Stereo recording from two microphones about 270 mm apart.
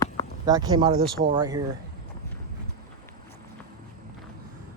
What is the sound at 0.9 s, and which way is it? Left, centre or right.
Speech, right.